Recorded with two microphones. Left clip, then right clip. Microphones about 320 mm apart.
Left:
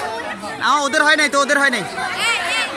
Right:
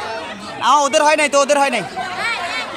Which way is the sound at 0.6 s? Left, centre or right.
Centre.